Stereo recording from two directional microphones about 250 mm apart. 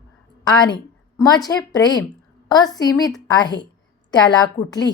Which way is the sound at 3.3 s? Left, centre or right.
Centre.